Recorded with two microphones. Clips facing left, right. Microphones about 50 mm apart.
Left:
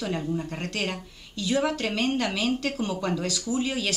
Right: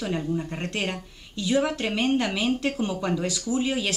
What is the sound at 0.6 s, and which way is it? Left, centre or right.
Speech, centre.